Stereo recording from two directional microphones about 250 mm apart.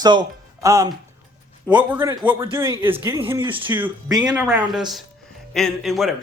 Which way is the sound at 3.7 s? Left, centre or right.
Centre.